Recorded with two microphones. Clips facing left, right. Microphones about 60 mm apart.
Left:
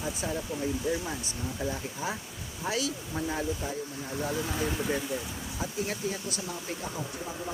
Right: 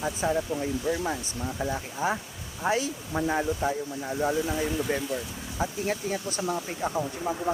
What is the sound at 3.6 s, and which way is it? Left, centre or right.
Speech, right.